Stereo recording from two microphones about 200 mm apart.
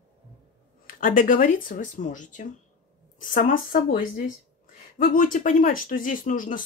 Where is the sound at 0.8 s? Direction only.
40° left (ahead or behind).